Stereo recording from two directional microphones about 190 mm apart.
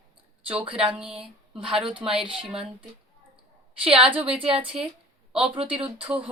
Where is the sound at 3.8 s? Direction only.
30° right (ahead or behind).